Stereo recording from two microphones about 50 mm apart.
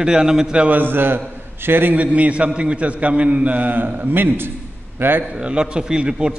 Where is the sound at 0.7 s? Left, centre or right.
Right.